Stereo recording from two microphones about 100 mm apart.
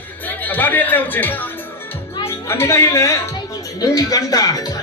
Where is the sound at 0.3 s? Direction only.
20° left (ahead or behind).